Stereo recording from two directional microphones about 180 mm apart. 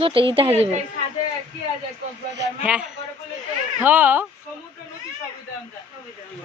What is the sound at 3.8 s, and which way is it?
Speech, 10° right (ahead or behind).